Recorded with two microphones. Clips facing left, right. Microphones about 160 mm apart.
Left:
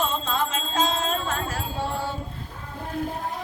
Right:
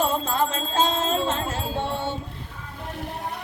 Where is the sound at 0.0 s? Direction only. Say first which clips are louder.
Right 3 dB; 35° right (ahead or behind).